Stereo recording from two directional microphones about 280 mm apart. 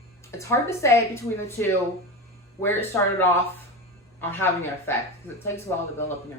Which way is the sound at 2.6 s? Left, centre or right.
Centre.